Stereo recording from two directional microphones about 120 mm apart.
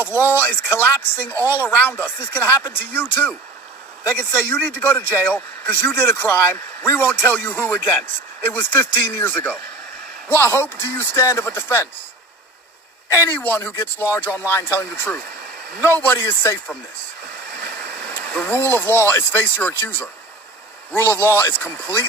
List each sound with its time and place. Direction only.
0.0 s speech: 20° left (ahead or behind)
13.1 s speech: 20° left (ahead or behind)
18.1 s speech: 15° left (ahead or behind)